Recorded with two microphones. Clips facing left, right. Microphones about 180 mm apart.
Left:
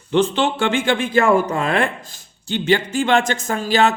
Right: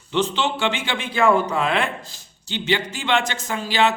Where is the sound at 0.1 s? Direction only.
50° left (ahead or behind).